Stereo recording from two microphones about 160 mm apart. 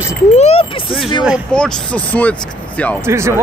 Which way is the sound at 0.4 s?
35° left (ahead or behind).